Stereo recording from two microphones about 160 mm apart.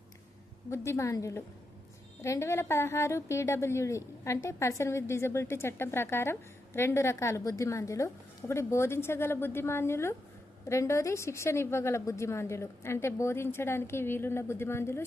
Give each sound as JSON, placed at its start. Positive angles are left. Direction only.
{"t": 0.9, "sound": "a woman's voice", "side_deg": 20}